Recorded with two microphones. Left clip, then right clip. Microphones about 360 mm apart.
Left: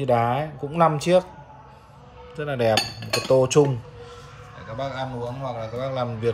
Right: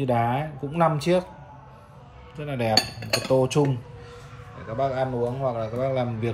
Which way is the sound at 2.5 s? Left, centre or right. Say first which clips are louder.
Left 2 dB; centre.